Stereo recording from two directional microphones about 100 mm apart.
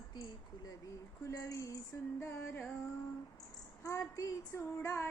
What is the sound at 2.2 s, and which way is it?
Child singing, 25° left (ahead or behind).